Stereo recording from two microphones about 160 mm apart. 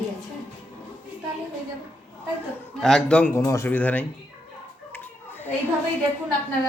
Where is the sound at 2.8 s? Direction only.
5° left (ahead or behind).